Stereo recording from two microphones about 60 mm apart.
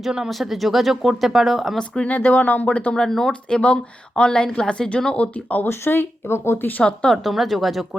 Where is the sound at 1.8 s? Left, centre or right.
Centre.